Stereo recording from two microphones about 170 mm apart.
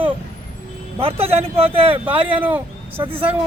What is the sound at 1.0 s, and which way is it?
Speech, 35° right (ahead or behind).